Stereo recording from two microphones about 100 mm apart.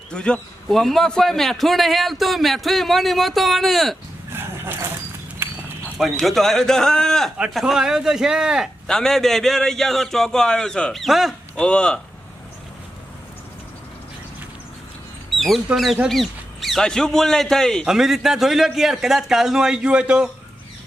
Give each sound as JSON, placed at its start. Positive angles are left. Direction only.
{"t": 0.1, "sound": "a man's voice", "side_deg": 10}
{"t": 4.3, "sound": "a sound", "side_deg": -25}
{"t": 6.0, "sound": "a man's voice", "side_deg": 0}
{"t": 7.5, "sound": "a man's voice", "side_deg": -5}
{"t": 8.9, "sound": "a man's voice", "side_deg": 5}
{"t": 11.5, "sound": "speech", "side_deg": 10}
{"t": 15.4, "sound": "a man's voice", "side_deg": 0}